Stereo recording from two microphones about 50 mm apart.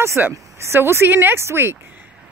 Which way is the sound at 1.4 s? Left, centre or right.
Right.